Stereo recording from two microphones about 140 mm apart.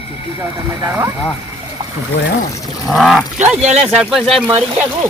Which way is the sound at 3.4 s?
55° right (ahead or behind).